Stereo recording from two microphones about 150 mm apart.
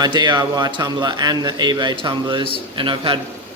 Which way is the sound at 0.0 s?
30° right (ahead or behind).